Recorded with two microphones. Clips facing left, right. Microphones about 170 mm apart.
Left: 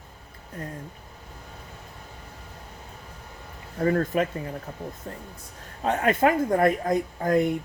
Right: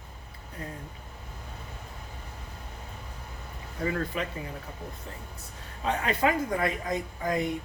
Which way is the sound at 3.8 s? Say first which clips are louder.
Left 7 dB; 45° left (ahead or behind).